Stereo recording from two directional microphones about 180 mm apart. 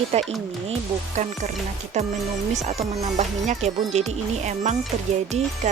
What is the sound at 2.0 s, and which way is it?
Speech, 40° right (ahead or behind).